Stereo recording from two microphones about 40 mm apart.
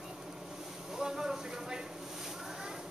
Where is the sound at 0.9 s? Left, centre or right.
Centre.